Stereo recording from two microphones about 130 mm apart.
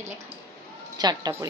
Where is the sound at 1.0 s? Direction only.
30° right (ahead or behind).